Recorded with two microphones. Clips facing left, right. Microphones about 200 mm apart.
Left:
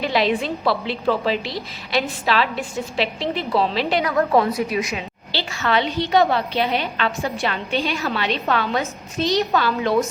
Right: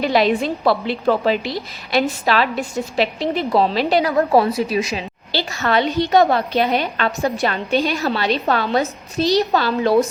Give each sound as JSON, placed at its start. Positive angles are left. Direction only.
{"t": 0.0, "sound": "a woman's voice", "side_deg": -45}
{"t": 5.3, "sound": "a woman's voice", "side_deg": -45}